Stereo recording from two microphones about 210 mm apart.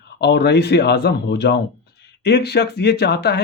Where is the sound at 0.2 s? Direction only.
55° left (ahead or behind).